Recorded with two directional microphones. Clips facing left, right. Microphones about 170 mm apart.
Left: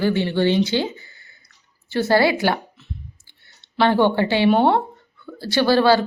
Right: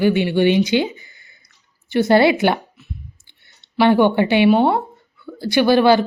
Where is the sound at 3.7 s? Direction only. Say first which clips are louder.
Right 3 dB; 15° right (ahead or behind).